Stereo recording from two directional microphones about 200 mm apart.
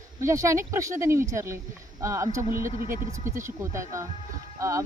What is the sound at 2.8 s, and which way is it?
Speech, 45° right (ahead or behind).